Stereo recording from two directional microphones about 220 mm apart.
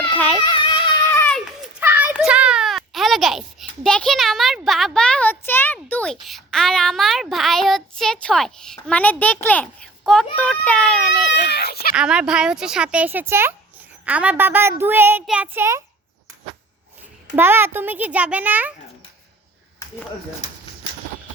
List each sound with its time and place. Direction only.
0.4 s a sound: 20° left (ahead or behind); by 1.7 s 5° left (ahead or behind)
1.8 s a sound: 10° right (ahead or behind)
6.2 s child singing: centre (ahead or behind)
10.0 s speech: centre (ahead or behind)
11.3 s speech: 50° left (ahead or behind)
11.9 s a child's voice: 5° right (ahead or behind)
17.3 s a child's voice: 10° right (ahead or behind)